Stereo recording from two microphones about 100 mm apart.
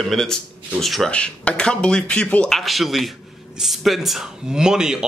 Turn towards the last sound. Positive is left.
turn(degrees=-5)  # may be behind; listen again after turning